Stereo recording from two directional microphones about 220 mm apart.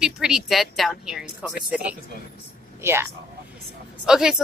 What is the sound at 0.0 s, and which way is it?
A woman's voice, 5° right (ahead or behind).